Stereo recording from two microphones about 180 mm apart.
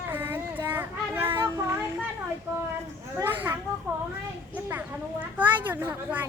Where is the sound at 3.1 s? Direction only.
10° right (ahead or behind).